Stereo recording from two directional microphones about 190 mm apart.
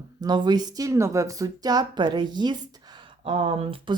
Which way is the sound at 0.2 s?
20° right (ahead or behind).